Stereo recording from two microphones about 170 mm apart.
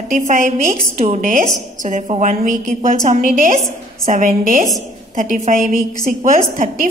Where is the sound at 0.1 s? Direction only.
50° right (ahead or behind).